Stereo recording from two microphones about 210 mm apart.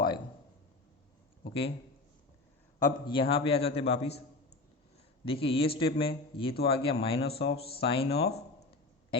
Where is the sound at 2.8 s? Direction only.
20° left (ahead or behind).